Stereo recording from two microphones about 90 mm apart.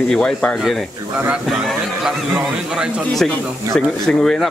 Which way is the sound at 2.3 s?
10° right (ahead or behind).